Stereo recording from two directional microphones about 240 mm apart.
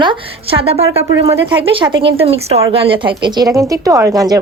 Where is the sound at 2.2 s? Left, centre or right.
Right.